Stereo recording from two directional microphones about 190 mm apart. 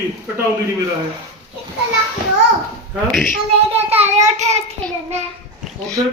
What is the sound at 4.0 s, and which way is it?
Speech, 35° right (ahead or behind).